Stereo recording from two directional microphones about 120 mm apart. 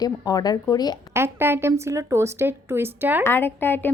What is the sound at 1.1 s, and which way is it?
Speech, 20° right (ahead or behind).